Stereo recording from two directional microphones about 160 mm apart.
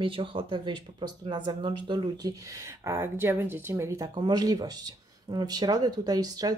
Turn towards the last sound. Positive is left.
turn(degrees=-25)  # may be behind; listen again after turning